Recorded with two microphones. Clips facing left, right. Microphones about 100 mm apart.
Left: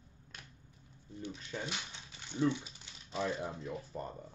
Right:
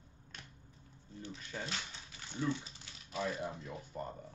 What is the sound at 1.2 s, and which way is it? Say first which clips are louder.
Speech: left 2 dB; 15° left (ahead or behind).